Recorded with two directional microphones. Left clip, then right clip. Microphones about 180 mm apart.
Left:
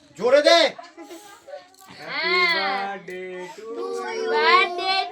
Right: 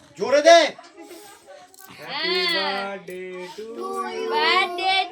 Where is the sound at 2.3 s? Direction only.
25° left (ahead or behind).